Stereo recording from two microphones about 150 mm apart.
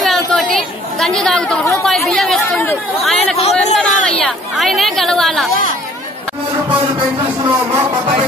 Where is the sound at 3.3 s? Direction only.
45° left (ahead or behind).